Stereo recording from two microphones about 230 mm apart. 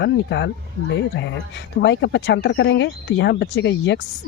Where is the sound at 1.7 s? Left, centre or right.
Left.